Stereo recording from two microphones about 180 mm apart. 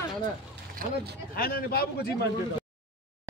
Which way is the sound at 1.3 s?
55° left (ahead or behind).